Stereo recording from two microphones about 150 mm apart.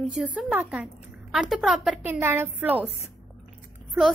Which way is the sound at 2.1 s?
15° right (ahead or behind).